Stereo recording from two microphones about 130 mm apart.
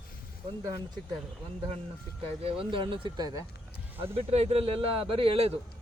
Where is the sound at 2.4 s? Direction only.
45° right (ahead or behind).